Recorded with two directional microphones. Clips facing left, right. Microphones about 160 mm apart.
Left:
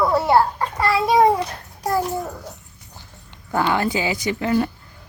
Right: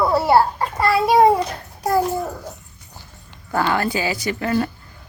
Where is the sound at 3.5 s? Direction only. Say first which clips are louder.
Even; 15° left (ahead or behind).